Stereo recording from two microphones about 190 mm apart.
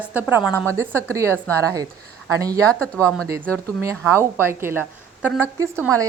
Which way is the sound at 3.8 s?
10° right (ahead or behind).